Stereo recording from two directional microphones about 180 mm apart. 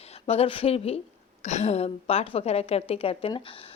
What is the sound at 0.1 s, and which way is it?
A woman's voice, 35° left (ahead or behind).